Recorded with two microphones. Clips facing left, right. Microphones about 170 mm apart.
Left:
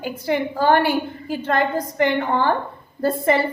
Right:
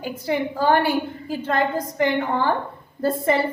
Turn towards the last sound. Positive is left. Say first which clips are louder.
# left 2 dB
turn(degrees=70)  # may be behind; listen again after turning